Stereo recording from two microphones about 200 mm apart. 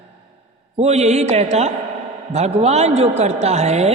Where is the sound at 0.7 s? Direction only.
35° right (ahead or behind).